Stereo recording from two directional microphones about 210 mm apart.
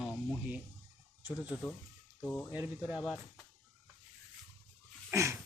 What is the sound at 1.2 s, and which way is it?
Speech, 5° right (ahead or behind).